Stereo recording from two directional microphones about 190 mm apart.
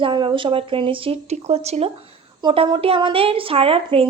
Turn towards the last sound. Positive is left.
turn(degrees=-30)  # may be behind; listen again after turning